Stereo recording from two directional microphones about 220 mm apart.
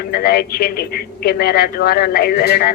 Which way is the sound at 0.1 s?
45° left (ahead or behind).